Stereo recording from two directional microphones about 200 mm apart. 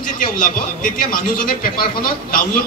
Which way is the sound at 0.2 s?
45° left (ahead or behind).